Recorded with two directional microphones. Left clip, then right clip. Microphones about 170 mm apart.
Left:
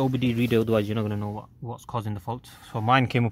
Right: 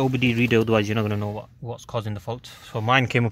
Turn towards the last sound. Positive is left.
turn(degrees=0)  # may be behind; listen again after turning